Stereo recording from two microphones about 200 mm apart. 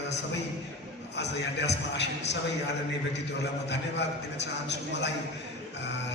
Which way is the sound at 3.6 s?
60° left (ahead or behind).